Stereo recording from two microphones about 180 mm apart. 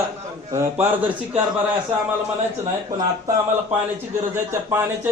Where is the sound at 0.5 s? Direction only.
15° right (ahead or behind).